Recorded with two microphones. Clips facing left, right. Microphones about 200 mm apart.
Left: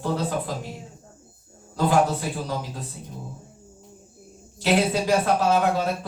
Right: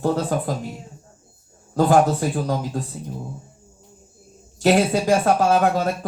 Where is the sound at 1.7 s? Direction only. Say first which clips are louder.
Right 5 dB; 45° right (ahead or behind).